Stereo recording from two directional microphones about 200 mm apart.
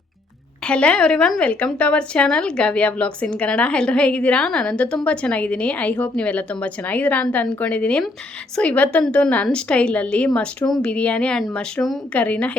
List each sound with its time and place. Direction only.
0.6 s a woman's voice: 5° left (ahead or behind)